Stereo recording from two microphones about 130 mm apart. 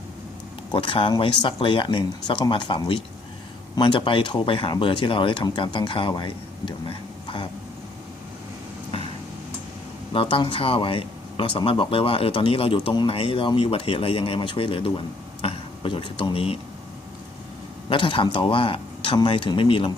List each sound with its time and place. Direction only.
0.7 s speech: 40° left (ahead or behind)
10.1 s speech: 45° left (ahead or behind)
17.8 s speech: 40° left (ahead or behind)